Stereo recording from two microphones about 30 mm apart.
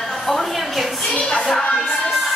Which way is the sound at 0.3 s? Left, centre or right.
Centre.